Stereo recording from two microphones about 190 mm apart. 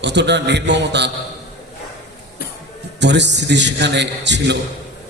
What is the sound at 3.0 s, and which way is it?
A man's voice, 65° right (ahead or behind).